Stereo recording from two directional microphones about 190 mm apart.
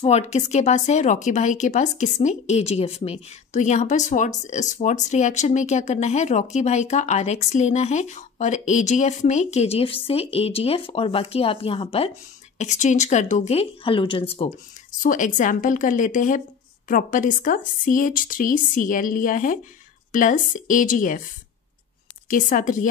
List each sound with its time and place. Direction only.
0.0 s speech: 35° left (ahead or behind)
15.0 s a woman's voice: 45° left (ahead or behind)
22.3 s a woman's voice: 45° left (ahead or behind)